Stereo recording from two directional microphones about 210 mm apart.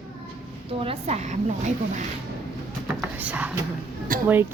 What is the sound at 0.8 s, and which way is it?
A woman's voice, 30° right (ahead or behind).